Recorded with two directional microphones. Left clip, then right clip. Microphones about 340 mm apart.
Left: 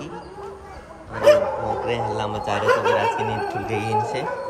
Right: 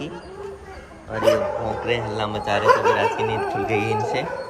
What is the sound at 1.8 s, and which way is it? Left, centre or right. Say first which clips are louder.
Speech: even; centre.